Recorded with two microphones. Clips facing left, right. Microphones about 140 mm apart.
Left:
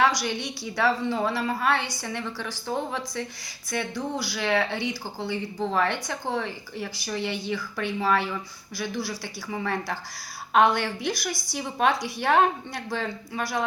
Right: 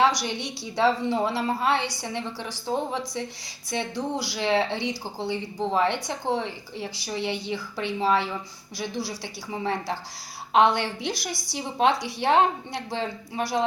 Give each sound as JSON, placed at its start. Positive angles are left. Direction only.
{"t": 0.0, "sound": "speech", "side_deg": -20}
{"t": 11.9, "sound": "a woman's voice", "side_deg": -75}
{"t": 12.2, "sound": "speech", "side_deg": -20}